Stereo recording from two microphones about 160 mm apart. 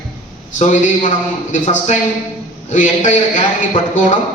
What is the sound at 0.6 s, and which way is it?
A man's voice, 50° left (ahead or behind).